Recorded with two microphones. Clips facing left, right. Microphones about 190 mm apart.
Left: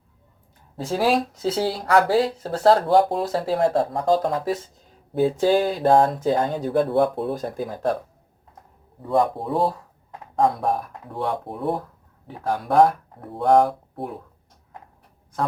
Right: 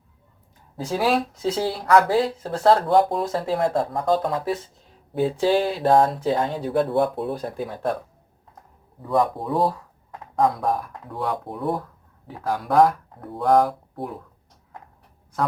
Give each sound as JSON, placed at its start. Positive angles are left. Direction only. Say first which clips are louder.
{"t": 0.9, "sound": "speech", "louder": "left 1 dB", "side_deg": 35}
{"t": 9.0, "sound": "speech", "louder": "left 1 dB", "side_deg": 30}